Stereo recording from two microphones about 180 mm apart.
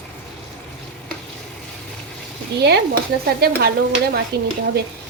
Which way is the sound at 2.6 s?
65° right (ahead or behind).